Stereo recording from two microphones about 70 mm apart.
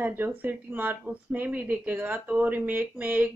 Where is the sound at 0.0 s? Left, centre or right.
Right.